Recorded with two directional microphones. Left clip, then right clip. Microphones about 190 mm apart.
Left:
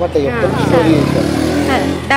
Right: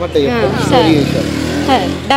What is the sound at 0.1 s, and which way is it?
Speech, 40° right (ahead or behind).